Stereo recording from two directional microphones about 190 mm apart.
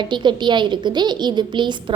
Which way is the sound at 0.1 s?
25° right (ahead or behind).